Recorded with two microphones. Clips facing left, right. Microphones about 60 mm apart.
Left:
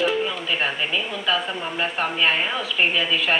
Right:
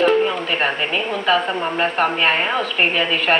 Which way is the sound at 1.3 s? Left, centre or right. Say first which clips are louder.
Right 6 dB; right.